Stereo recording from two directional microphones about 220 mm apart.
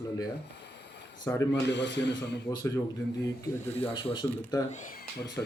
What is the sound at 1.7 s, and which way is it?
Speech, 50° left (ahead or behind).